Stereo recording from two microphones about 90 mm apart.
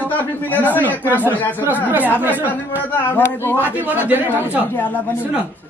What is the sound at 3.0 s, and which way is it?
A man's voice, 20° left (ahead or behind).